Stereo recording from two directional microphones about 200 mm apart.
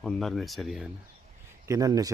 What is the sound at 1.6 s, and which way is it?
Speech, 15° right (ahead or behind).